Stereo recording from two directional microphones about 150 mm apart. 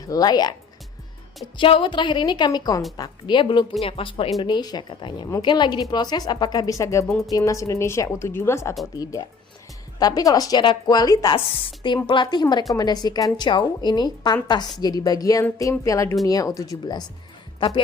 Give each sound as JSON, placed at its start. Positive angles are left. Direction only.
{"t": 0.0, "sound": "speech", "side_deg": 25}
{"t": 1.5, "sound": "a woman's voice", "side_deg": 35}
{"t": 4.4, "sound": "a woman's voice", "side_deg": 30}
{"t": 10.0, "sound": "speech", "side_deg": 25}
{"t": 11.3, "sound": "a woman's voice", "side_deg": 40}